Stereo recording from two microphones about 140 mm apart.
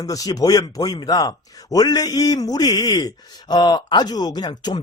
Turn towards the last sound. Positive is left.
turn(degrees=30)  # may be behind; listen again after turning